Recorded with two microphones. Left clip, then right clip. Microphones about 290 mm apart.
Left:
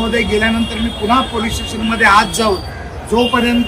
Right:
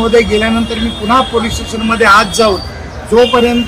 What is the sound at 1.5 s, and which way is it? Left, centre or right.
A man's voice, centre.